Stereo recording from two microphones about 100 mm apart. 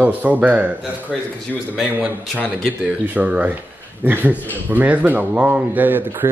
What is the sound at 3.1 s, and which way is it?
Speech, 15° right (ahead or behind).